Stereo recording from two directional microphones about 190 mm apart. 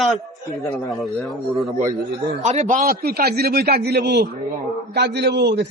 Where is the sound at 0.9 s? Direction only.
Centre (ahead or behind).